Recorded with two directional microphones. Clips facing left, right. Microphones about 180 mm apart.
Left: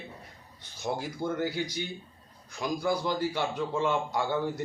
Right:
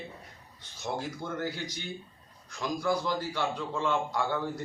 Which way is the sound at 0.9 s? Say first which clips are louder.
Left 3 dB; 10° left (ahead or behind).